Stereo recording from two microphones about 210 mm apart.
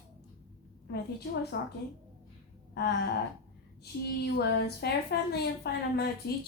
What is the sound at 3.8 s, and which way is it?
A woman's voice, 50° left (ahead or behind).